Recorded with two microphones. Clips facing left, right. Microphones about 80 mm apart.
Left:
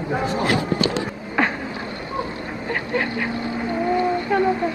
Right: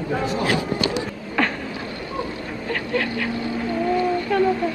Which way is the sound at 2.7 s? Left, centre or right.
Left.